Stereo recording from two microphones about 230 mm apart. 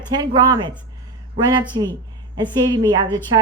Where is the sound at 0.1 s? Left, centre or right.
Centre.